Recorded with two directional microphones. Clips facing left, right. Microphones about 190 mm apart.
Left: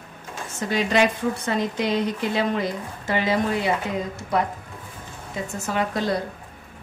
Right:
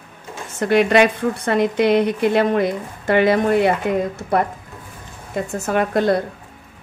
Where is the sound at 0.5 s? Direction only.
60° right (ahead or behind).